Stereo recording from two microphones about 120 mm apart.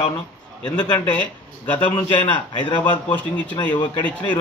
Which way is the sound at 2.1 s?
40° left (ahead or behind).